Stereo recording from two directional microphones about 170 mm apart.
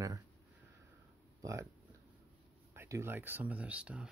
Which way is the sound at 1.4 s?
20° right (ahead or behind).